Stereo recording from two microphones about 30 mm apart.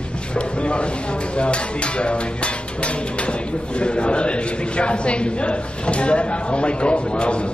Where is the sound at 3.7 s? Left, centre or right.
Left.